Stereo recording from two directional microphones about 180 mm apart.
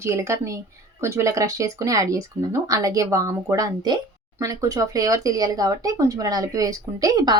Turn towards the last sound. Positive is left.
turn(degrees=-20)  # may be behind; listen again after turning